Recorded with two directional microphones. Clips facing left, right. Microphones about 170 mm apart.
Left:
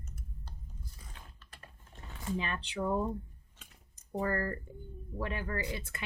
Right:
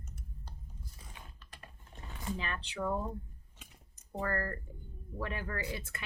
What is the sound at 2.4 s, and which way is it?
Speech, 20° left (ahead or behind).